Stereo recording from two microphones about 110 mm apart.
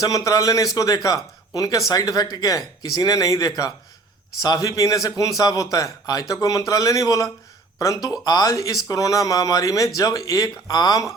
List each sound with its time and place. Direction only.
0.0 s speech: 30° left (ahead or behind)